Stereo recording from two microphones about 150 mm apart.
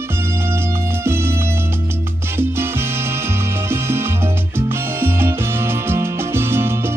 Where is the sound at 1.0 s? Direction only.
15° right (ahead or behind).